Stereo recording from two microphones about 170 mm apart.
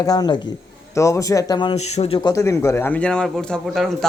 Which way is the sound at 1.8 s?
40° left (ahead or behind).